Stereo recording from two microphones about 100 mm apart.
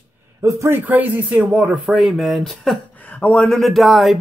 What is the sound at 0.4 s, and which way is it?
Speech, 30° right (ahead or behind).